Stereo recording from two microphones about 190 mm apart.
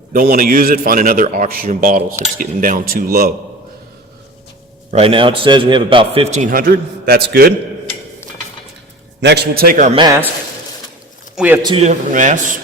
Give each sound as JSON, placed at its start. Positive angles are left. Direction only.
{"t": 0.1, "sound": "a man's voice", "side_deg": -50}
{"t": 4.9, "sound": "a man's voice", "side_deg": -30}
{"t": 9.2, "sound": "a man's voice", "side_deg": -55}
{"t": 9.9, "sound": "a man's voice", "side_deg": -25}
{"t": 11.3, "sound": "a man's voice", "side_deg": -10}
{"t": 11.8, "sound": "a man's voice", "side_deg": -40}